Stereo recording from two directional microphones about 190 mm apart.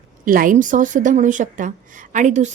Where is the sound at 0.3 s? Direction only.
45° right (ahead or behind).